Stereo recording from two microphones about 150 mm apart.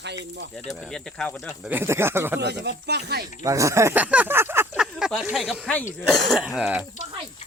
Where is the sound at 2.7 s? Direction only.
90° right.